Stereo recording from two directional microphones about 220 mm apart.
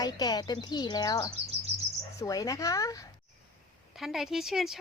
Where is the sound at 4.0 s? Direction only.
Centre (ahead or behind).